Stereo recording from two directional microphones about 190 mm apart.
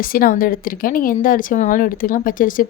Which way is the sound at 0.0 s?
50° left (ahead or behind).